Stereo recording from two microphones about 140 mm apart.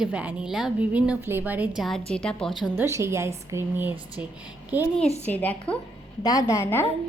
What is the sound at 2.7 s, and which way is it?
A woman's voice, 20° right (ahead or behind).